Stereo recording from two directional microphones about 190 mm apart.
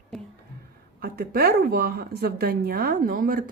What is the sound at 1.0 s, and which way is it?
A woman's voice, 50° right (ahead or behind).